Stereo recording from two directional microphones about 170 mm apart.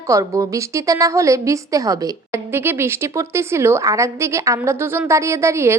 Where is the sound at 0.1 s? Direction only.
20° right (ahead or behind).